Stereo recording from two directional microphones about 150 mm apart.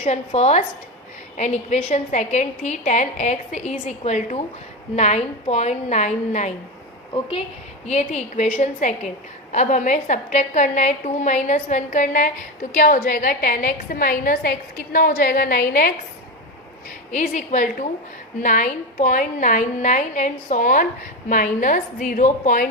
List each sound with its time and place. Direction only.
0.0 s a woman's voice: 50° left (ahead or behind)
7.1 s a woman's voice: 35° left (ahead or behind)
7.9 s a woman's voice: 50° left (ahead or behind); by 15.9 s 65° left (ahead or behind)
17.1 s a woman's voice: 55° left (ahead or behind)